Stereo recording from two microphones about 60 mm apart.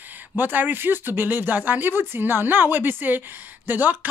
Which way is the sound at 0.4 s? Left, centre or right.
Right.